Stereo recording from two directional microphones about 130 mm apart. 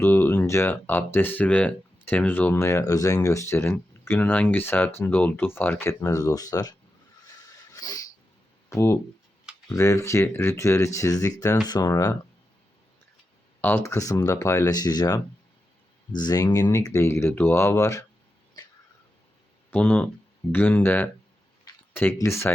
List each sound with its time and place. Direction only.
0.0 s speech: 20° left (ahead or behind)
7.8 s a sound: 30° left (ahead or behind)
8.7 s speech: 20° left (ahead or behind)
13.6 s speech: 15° left (ahead or behind)
18.6 s a sound: 30° left (ahead or behind)
19.7 s speech: 10° left (ahead or behind)